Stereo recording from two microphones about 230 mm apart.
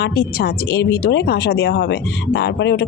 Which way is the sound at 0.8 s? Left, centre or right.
Left.